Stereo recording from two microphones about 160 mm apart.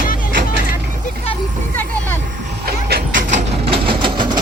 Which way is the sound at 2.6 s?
70° right (ahead or behind).